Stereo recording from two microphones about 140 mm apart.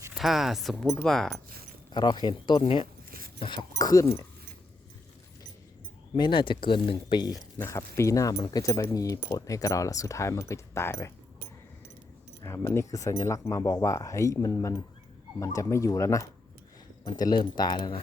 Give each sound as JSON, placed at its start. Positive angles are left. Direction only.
{"t": 0.1, "sound": "speech", "side_deg": 0}
{"t": 1.9, "sound": "speech", "side_deg": 30}
{"t": 3.1, "sound": "a sound", "side_deg": -90}
{"t": 3.4, "sound": "speech", "side_deg": 35}
{"t": 6.1, "sound": "speech", "side_deg": 35}
{"t": 7.6, "sound": "speech", "side_deg": 20}
{"t": 12.4, "sound": "speech", "side_deg": 20}